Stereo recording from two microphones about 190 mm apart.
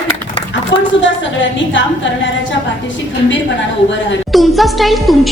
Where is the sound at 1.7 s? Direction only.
75° left (ahead or behind).